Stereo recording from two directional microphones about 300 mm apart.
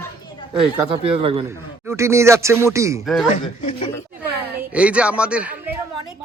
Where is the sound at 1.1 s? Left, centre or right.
Centre.